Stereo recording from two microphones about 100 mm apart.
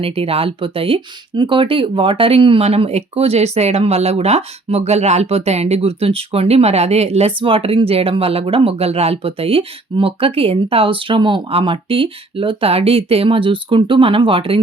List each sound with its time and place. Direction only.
0.0 s speech: 70° right (ahead or behind)